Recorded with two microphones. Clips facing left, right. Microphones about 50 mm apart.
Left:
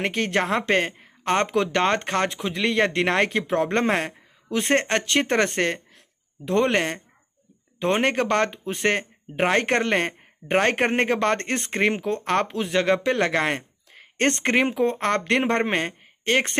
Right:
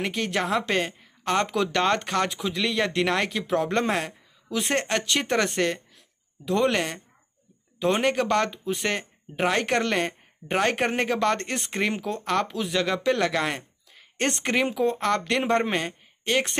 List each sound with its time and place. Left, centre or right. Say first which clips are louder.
0.0 s speech: left 3 dB; left
14.1 s speech: left 4 dB; left